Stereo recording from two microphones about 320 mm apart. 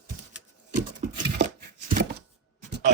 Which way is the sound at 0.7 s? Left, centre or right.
Right.